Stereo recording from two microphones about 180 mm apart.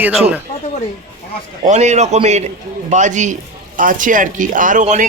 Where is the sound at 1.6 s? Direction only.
40° right (ahead or behind).